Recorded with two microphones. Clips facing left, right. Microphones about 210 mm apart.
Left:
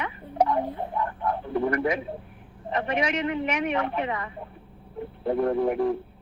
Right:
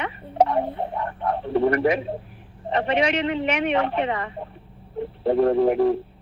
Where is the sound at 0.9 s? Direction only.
65° right (ahead or behind).